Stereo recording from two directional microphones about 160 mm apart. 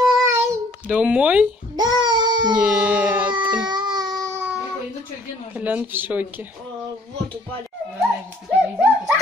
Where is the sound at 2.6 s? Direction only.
10° right (ahead or behind).